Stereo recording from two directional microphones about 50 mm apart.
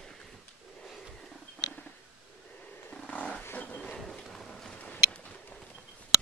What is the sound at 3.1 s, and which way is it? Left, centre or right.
Wild animals, left.